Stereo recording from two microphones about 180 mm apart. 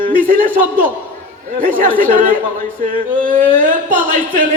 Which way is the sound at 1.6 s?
50° right (ahead or behind).